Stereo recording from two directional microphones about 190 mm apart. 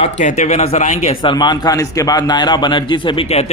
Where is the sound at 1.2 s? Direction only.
25° left (ahead or behind).